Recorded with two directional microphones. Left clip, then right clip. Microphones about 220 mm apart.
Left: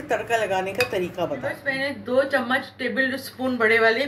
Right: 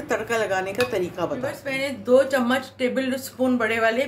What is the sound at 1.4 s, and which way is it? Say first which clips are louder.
Speech: left 1 dB; 45° right (ahead or behind).